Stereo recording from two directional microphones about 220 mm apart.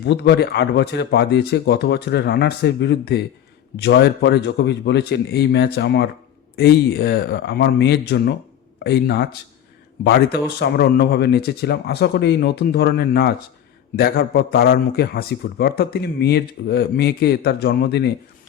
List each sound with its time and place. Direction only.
0.0 s a man's voice: 50° left (ahead or behind)